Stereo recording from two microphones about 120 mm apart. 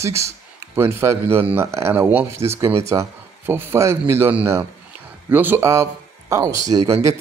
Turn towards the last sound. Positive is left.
turn(degrees=-30)  # may be behind; listen again after turning